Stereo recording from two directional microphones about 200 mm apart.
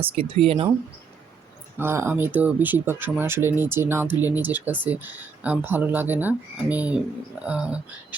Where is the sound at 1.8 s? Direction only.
10° right (ahead or behind).